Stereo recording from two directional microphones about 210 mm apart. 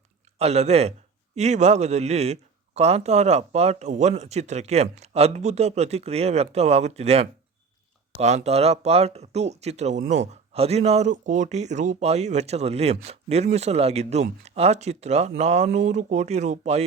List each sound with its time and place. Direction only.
0.3 s a man's voice: 30° right (ahead or behind)